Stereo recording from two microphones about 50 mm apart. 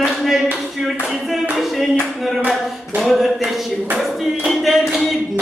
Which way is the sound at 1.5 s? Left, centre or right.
Centre.